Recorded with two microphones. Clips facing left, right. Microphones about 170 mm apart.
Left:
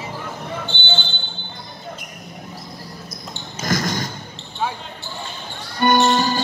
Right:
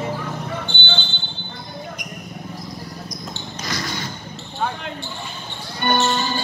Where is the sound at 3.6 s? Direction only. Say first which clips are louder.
Left 7 dB; 45° left (ahead or behind).